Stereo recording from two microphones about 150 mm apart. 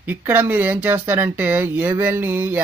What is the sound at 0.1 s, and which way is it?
Speech, 15° right (ahead or behind).